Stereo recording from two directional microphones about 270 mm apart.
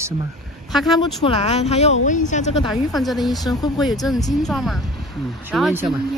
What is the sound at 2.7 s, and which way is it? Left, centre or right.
Speech, centre.